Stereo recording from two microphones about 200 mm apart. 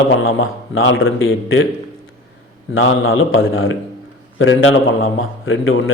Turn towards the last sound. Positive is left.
turn(degrees=80)